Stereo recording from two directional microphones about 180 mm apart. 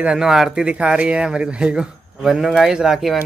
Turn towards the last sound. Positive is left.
turn(degrees=-5)  # may be behind; listen again after turning